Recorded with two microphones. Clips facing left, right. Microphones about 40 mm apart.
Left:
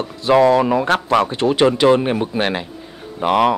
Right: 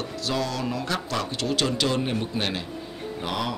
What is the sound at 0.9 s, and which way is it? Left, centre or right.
Speech, left.